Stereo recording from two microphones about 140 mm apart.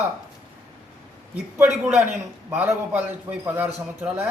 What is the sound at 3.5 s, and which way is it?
Speech, 15° right (ahead or behind).